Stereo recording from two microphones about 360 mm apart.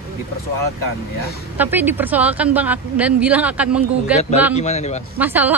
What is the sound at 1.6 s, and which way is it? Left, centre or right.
A woman's voice, centre.